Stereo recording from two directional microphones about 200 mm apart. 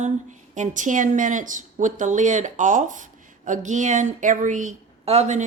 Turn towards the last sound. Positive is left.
turn(degrees=-35)  # may be behind; listen again after turning